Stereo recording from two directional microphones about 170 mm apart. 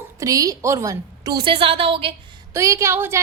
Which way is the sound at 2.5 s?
20° right (ahead or behind).